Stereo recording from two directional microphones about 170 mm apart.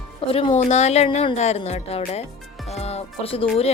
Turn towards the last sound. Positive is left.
turn(degrees=35)  # may be behind; listen again after turning